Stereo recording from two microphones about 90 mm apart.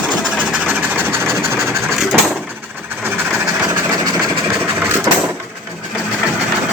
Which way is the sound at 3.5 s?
40° right (ahead or behind).